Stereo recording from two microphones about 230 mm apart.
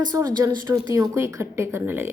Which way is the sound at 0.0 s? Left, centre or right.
Centre.